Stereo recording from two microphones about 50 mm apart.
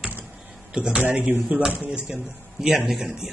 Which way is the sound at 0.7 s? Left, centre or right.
Centre.